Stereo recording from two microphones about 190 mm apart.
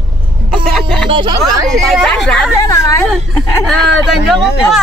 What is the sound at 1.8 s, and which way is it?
Speech, centre (ahead or behind).